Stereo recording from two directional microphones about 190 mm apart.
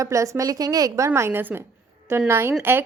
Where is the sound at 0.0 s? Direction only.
15° right (ahead or behind).